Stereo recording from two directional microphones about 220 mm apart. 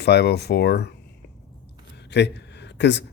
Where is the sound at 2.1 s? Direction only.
50° left (ahead or behind).